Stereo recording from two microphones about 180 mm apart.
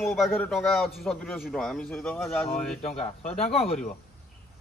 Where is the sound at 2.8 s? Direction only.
35° left (ahead or behind).